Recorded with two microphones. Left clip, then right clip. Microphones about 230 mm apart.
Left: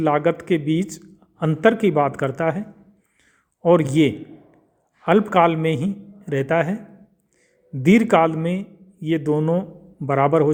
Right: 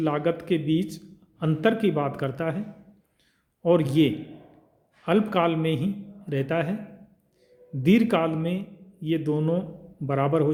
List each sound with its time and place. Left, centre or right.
0.0 s a man's voice: left
3.6 s a man's voice: left
7.8 s a man's voice: left